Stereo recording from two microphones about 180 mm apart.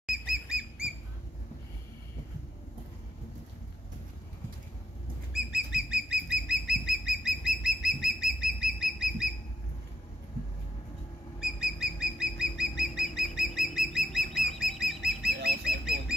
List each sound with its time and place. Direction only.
0.0 s bird: 5° right (ahead or behind)
5.3 s bird flight: 5° right (ahead or behind)
5.9 s bird: 5° right (ahead or behind)
11.4 s bird: 5° right (ahead or behind)
15.4 s bird: 60° right (ahead or behind)